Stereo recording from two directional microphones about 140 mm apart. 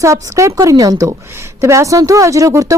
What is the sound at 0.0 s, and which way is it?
A woman's voice, 20° right (ahead or behind).